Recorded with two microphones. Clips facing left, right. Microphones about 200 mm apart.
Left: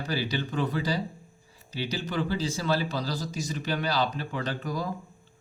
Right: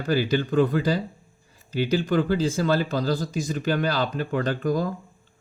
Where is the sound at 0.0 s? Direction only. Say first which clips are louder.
Right 7 dB; 50° right (ahead or behind).